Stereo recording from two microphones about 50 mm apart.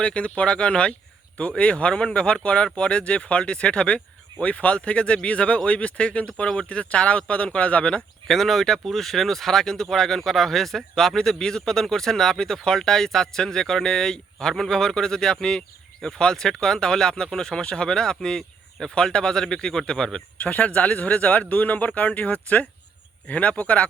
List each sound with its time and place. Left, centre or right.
0.0 s speech: left
8.3 s speech: centre
20.4 s speech: left